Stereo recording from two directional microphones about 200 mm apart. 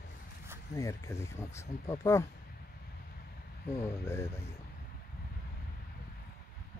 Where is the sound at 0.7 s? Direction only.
15° left (ahead or behind).